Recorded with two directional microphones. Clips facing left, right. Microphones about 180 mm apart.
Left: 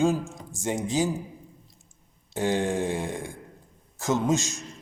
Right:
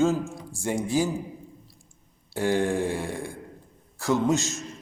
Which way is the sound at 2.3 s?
20° left (ahead or behind).